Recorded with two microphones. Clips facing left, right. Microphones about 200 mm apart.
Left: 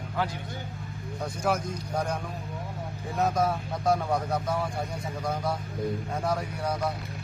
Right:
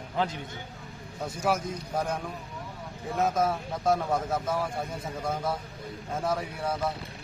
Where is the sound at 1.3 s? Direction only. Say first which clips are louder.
Even; 5° right (ahead or behind).